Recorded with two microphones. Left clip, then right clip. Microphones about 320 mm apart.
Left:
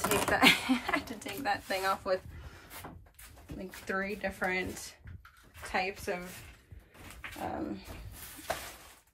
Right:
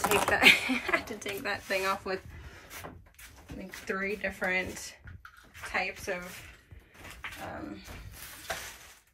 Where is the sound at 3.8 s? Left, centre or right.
Centre.